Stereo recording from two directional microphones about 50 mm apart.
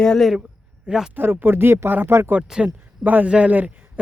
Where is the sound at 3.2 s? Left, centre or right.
Right.